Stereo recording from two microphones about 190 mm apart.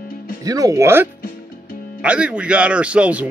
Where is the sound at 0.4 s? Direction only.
20° right (ahead or behind).